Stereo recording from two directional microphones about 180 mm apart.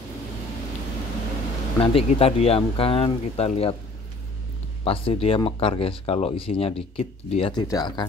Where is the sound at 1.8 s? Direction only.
30° left (ahead or behind).